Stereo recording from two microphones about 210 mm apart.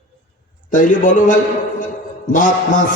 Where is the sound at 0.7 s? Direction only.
40° left (ahead or behind).